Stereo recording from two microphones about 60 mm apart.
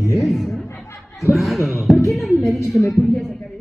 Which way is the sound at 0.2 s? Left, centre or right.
Centre.